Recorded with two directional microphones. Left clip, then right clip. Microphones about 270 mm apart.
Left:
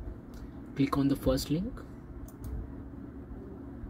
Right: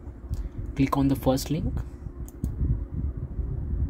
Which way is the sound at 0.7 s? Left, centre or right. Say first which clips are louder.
Right 4 dB; right.